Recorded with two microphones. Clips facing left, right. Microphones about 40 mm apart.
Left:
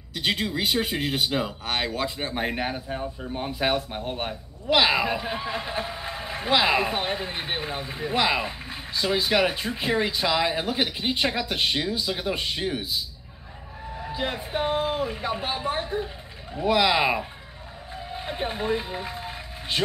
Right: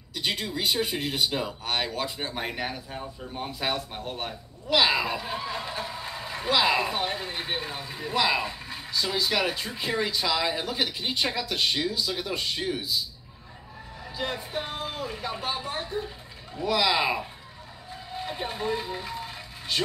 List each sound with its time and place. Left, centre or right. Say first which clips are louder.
0.1 s speech: left 4 dB; left
1.9 s speech: left 3 dB; centre
13.9 s speech: left 3 dB; left
18.1 s vehicle: left 2 dB; left